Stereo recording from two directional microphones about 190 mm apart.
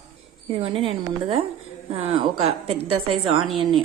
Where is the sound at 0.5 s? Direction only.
30° right (ahead or behind).